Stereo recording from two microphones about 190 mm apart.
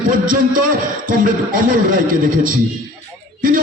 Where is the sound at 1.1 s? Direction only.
45° right (ahead or behind).